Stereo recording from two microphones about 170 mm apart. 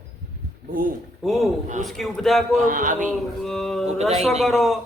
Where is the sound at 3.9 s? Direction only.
40° right (ahead or behind).